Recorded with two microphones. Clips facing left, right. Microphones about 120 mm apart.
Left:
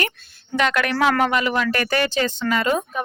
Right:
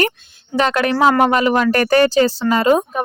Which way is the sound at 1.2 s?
40° right (ahead or behind).